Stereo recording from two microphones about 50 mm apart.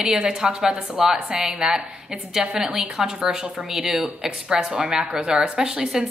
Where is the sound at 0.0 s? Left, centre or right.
Centre.